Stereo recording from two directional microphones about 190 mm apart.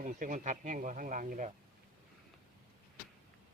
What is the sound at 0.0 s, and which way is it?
Speech, 45° right (ahead or behind).